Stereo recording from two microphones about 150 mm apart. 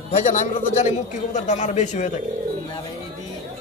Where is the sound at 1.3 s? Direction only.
50° left (ahead or behind).